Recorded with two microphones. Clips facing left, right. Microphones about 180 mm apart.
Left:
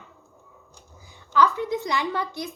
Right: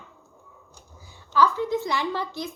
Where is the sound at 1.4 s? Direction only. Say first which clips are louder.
Right 1 dB; 15° left (ahead or behind).